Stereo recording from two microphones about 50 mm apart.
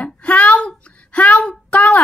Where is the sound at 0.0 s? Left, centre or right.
Left.